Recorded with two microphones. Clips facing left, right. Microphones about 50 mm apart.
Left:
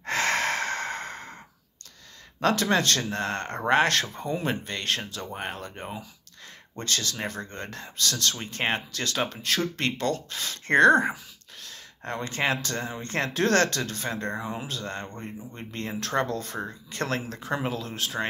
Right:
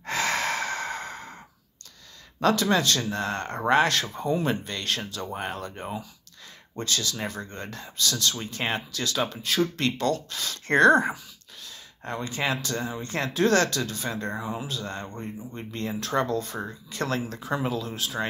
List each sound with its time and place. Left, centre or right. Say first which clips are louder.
0.0 s sigh: left 1 dB; left
2.4 s speech: right 1 dB; left
4.2 s speech: right 3 dB; left
6.8 s speech: right 1 dB; left
8.4 s speech: left 1 dB; left
11.6 s speech: left 1 dB; left